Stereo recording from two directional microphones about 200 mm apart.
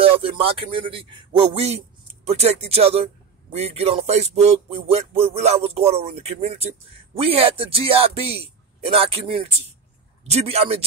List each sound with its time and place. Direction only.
0.0 s a man's voice: 25° right (ahead or behind)
2.2 s music: 30° right (ahead or behind)
7.2 s a man's voice: 30° right (ahead or behind)
10.2 s music: 30° right (ahead or behind)